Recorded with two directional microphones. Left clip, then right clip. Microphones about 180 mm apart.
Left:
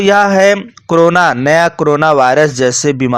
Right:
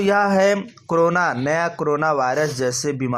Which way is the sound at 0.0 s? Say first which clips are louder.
Left 8 dB; 25° left (ahead or behind).